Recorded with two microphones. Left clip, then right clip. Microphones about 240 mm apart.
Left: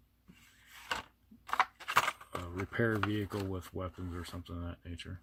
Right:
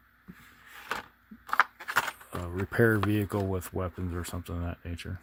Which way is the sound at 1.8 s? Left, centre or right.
Centre.